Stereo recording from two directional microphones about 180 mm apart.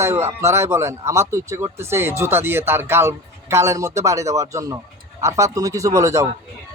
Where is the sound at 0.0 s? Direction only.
15° right (ahead or behind).